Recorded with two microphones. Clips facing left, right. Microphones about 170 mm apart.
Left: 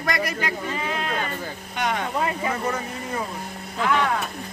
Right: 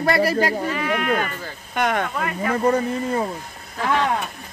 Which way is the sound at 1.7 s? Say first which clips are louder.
Right 5 dB; 55° right (ahead or behind).